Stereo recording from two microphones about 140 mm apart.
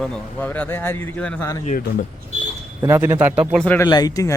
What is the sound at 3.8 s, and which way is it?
Speech, 30° left (ahead or behind).